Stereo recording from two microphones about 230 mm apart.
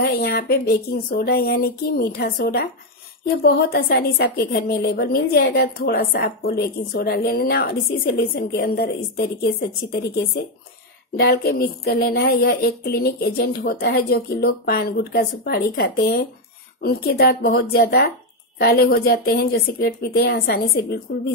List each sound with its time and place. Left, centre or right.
0.0 s a woman's voice: left